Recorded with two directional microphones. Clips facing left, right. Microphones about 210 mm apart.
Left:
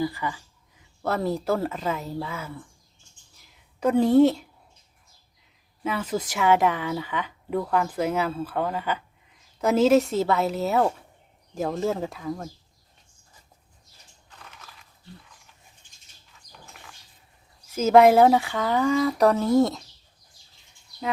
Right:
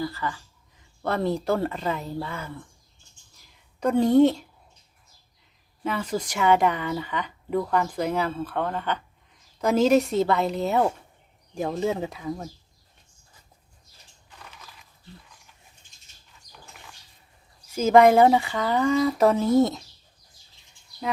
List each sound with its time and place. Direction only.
0.0 s speech: 15° left (ahead or behind)
1.0 s speech: 5° left (ahead or behind)
3.8 s speech: 5° left (ahead or behind)
5.8 s speech: 5° left (ahead or behind)
17.7 s speech: centre (ahead or behind)